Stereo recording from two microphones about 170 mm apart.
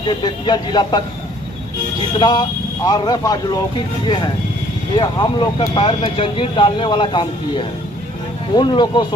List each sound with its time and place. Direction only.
0.0 s speech: 30° left (ahead or behind)
2.1 s speech: 25° left (ahead or behind)